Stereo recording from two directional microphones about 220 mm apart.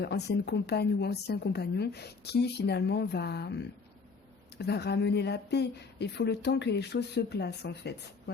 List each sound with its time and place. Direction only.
0.0 s a woman's voice: 50° left (ahead or behind)